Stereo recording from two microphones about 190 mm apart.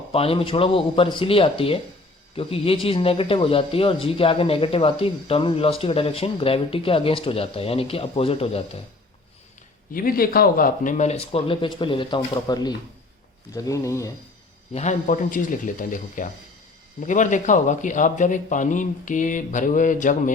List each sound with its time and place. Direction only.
0.1 s speech: 30° left (ahead or behind)
9.9 s a man's voice: 50° left (ahead or behind); by 14.1 s 15° left (ahead or behind)
14.7 s a man's voice: 35° left (ahead or behind)